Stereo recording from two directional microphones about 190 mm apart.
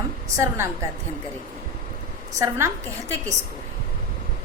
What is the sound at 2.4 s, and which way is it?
Speech, 15° right (ahead or behind).